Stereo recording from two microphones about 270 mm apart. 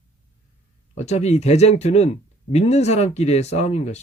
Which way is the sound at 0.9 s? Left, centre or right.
Left.